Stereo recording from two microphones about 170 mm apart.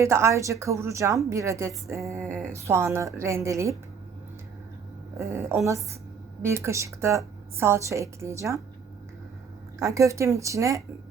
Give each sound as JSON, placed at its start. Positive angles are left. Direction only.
{"t": 0.0, "sound": "a woman's voice", "side_deg": -15}
{"t": 2.2, "sound": "speech", "side_deg": 5}
{"t": 2.5, "sound": "a woman's voice", "side_deg": -15}
{"t": 5.1, "sound": "a woman's voice", "side_deg": -15}
{"t": 9.7, "sound": "a woman's voice", "side_deg": -20}